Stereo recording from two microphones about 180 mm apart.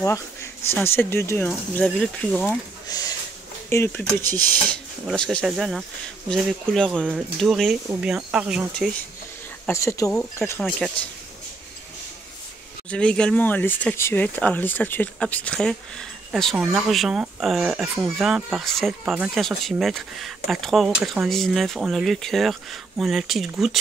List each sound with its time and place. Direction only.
0.0 s speech: 15° left (ahead or behind)
2.9 s speech: 20° left (ahead or behind); by 8.6 s 5° right (ahead or behind)
9.7 s speech: 15° left (ahead or behind)
12.9 s speech: 5° left (ahead or behind)